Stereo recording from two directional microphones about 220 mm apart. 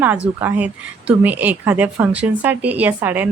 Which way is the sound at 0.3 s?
5° right (ahead or behind).